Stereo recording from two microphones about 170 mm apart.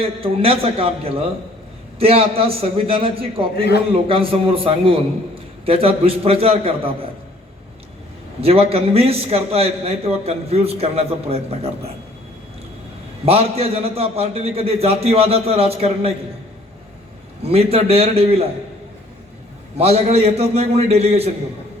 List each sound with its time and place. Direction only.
0.0 s a man's voice: 35° right (ahead or behind)
8.4 s a man's voice: 35° right (ahead or behind)
13.2 s a man's voice: 35° right (ahead or behind)
17.4 s a man's voice: 35° right (ahead or behind)
19.7 s a man's voice: 35° right (ahead or behind)